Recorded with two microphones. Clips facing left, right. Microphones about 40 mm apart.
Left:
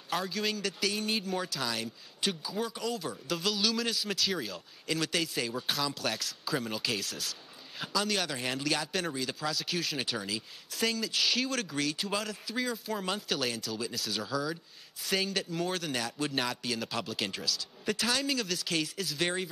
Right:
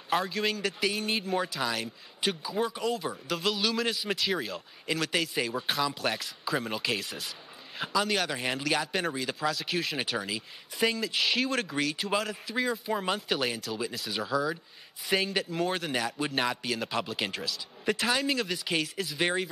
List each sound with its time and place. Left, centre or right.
0.2 s speech: centre
5.3 s speech: centre